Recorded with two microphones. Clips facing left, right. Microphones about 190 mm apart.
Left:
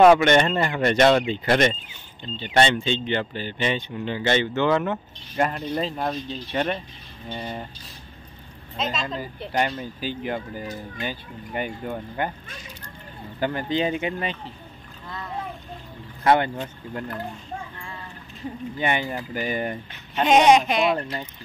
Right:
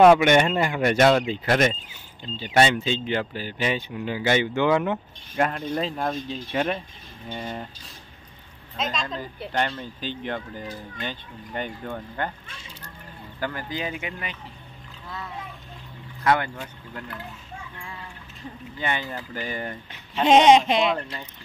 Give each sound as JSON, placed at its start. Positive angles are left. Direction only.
{"t": 0.2, "sound": "speech", "side_deg": -10}
{"t": 4.9, "sound": "speech", "side_deg": 0}
{"t": 8.7, "sound": "a woman's voice", "side_deg": 0}
{"t": 13.4, "sound": "speech", "side_deg": 25}
{"t": 16.3, "sound": "speech", "side_deg": 25}
{"t": 18.8, "sound": "speech", "side_deg": 15}
{"t": 20.2, "sound": "speech", "side_deg": -25}